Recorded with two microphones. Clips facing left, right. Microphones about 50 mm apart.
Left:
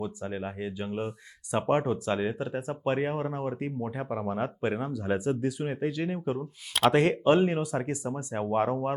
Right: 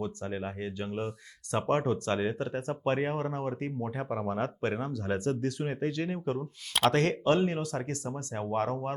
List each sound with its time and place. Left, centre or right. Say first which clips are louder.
0.0 s speech: left 1 dB; centre
6.9 s speech: left 4 dB; centre